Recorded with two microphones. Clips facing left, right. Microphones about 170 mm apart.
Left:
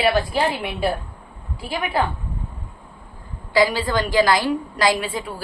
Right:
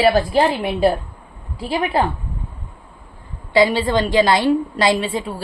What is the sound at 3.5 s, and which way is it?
A woman's voice, 25° right (ahead or behind).